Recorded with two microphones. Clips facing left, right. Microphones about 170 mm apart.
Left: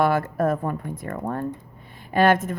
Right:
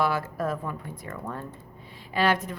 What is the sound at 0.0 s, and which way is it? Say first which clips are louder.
A woman's voice: left 6 dB; 50° left (ahead or behind).